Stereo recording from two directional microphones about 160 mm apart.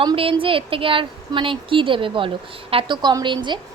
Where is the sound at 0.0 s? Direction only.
30° right (ahead or behind).